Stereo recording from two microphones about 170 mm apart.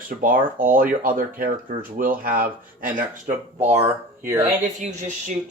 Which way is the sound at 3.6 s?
15° right (ahead or behind).